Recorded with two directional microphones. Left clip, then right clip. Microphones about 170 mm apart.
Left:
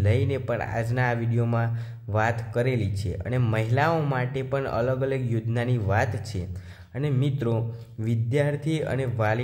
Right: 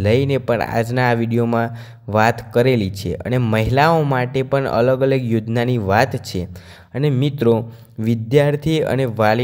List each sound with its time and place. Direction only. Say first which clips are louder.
0.0 s speech: right 10 dB; 50° right (ahead or behind)